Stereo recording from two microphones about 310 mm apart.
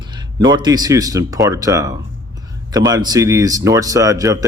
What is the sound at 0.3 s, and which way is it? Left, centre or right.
Speech, centre.